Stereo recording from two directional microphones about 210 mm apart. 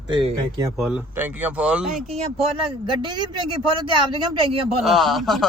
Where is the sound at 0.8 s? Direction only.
5° right (ahead or behind).